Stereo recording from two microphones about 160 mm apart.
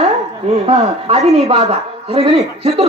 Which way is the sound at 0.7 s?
40° right (ahead or behind).